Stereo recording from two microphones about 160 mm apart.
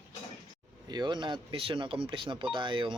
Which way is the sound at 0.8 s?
25° right (ahead or behind).